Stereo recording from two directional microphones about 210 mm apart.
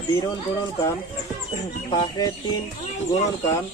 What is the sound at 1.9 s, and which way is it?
Speech, 20° left (ahead or behind).